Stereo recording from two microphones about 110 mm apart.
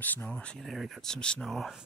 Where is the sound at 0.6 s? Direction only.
Centre (ahead or behind).